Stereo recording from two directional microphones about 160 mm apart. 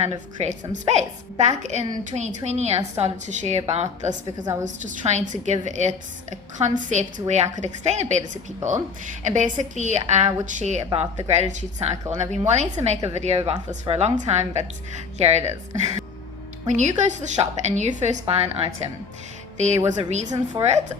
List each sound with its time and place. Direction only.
0.0 s a woman's voice: 45° right (ahead or behind)
20.3 s a woman's voice: 25° right (ahead or behind)